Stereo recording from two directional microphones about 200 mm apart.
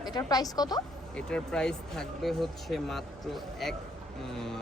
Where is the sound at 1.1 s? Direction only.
5° left (ahead or behind).